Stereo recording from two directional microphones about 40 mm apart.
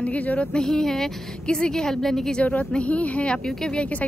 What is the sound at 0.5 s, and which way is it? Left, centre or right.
A woman's voice, centre.